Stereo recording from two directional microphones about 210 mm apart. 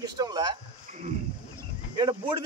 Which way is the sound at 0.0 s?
20° right (ahead or behind).